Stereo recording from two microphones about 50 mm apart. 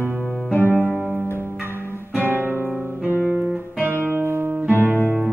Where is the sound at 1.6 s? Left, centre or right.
Right.